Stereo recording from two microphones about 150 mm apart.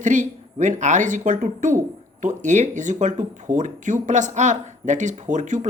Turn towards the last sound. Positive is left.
turn(degrees=-55)  # may be behind; listen again after turning